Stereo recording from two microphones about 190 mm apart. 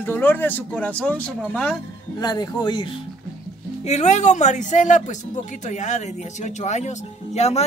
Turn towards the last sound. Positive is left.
turn(degrees=35)  # may be behind; listen again after turning